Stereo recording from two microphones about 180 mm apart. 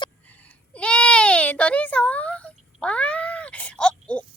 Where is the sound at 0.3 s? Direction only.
10° left (ahead or behind).